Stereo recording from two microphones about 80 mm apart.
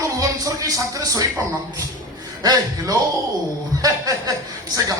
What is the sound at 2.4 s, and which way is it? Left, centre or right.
Speech, right.